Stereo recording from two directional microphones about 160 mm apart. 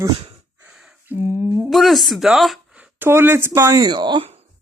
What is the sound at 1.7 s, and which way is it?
Speech, centre (ahead or behind).